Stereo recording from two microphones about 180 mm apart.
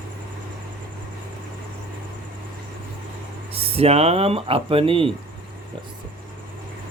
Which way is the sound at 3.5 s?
30° right (ahead or behind).